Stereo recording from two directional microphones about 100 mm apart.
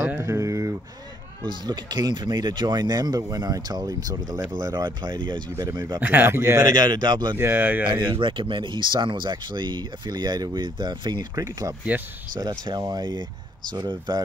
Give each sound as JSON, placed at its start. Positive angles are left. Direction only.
{"t": 0.1, "sound": "a sound", "side_deg": -30}
{"t": 1.5, "sound": "speech", "side_deg": -45}
{"t": 5.9, "sound": "speech", "side_deg": -20}
{"t": 6.7, "sound": "speech", "side_deg": -45}
{"t": 7.3, "sound": "speech", "side_deg": -20}
{"t": 7.8, "sound": "speech", "side_deg": -60}